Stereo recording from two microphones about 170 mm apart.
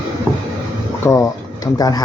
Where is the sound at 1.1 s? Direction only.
20° left (ahead or behind).